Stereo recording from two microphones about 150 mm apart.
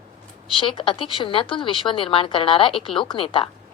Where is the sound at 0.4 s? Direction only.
35° left (ahead or behind).